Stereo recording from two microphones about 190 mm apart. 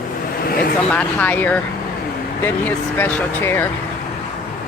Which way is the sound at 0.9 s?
10° left (ahead or behind).